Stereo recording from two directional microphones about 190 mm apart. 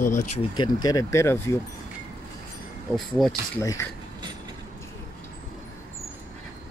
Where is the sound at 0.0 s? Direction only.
45° left (ahead or behind).